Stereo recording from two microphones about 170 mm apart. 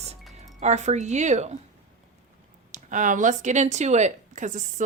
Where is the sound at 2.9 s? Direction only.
50° right (ahead or behind).